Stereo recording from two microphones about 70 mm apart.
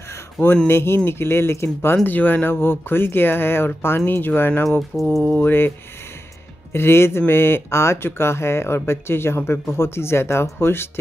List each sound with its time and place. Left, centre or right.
0.7 s speech: left
2.0 s speech: left
5.2 s mantra: centre
6.7 s speech: left